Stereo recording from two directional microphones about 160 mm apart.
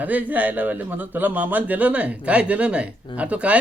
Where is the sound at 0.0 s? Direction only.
10° right (ahead or behind).